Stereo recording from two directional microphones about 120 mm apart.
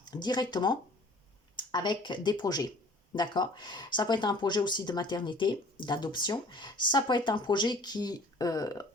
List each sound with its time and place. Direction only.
0.0 s speech: 35° left (ahead or behind)